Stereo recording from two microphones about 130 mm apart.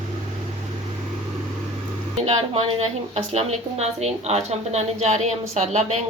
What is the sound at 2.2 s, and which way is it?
Speech, 50° right (ahead or behind).